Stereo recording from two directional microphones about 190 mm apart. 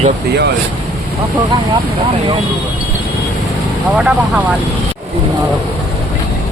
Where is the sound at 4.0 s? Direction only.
5° right (ahead or behind).